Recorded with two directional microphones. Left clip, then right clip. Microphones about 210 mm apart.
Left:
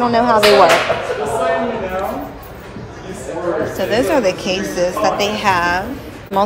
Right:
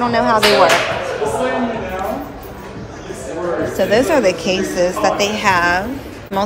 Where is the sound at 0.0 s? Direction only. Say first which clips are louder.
Left 1 dB; 20° left (ahead or behind).